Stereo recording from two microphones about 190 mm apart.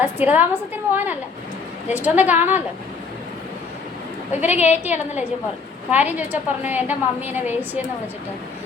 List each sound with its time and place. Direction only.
0.0 s a woman's voice: 10° right (ahead or behind)
4.3 s a woman's voice: 10° right (ahead or behind)